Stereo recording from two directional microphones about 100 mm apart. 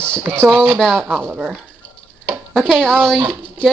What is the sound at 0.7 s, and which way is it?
Speech, 5° left (ahead or behind).